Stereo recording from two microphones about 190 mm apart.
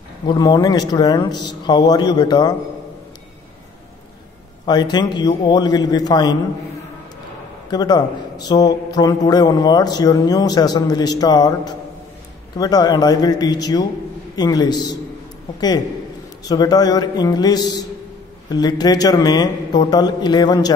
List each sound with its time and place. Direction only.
0.3 s a man's voice: 20° left (ahead or behind)
4.6 s a man's voice: 20° left (ahead or behind)
7.7 s a man's voice: 20° left (ahead or behind)
16.4 s a man's voice: 20° left (ahead or behind)